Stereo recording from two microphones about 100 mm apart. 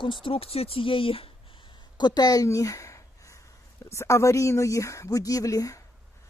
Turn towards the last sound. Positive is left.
turn(degrees=35)  # may be behind; listen again after turning